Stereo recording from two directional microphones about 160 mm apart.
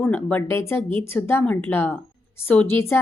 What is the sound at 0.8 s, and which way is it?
Speech, 30° right (ahead or behind).